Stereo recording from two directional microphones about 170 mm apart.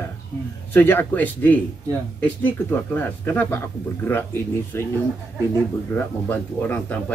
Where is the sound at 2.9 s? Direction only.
10° left (ahead or behind).